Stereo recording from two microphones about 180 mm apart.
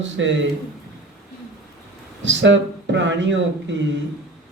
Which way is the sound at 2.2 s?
90° right.